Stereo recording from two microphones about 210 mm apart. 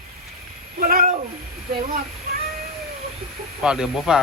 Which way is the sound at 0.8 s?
45° right (ahead or behind).